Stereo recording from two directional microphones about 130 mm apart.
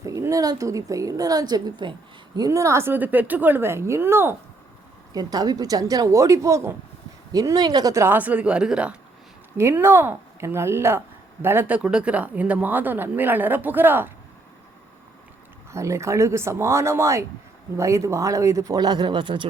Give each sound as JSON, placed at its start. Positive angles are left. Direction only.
{"t": 0.0, "sound": "a woman's voice", "side_deg": -25}
{"t": 5.1, "sound": "a woman's voice", "side_deg": -30}
{"t": 9.6, "sound": "a woman's voice", "side_deg": -20}
{"t": 15.7, "sound": "a woman's voice", "side_deg": -20}